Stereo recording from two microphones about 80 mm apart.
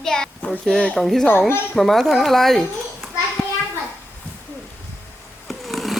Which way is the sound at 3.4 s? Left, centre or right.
Left.